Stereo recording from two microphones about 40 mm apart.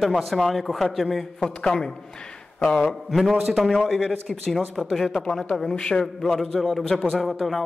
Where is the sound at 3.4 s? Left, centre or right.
Centre.